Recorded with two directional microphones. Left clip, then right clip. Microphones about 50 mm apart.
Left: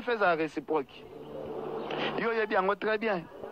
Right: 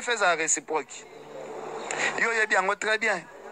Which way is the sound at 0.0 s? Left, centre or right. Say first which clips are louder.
Right 3 dB; left.